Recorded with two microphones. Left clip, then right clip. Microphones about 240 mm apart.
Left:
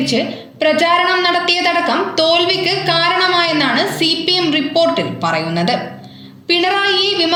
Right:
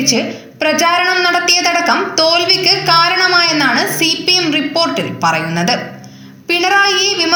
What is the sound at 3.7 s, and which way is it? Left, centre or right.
Speech, right.